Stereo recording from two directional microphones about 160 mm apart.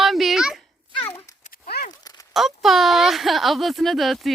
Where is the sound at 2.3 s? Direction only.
Centre (ahead or behind).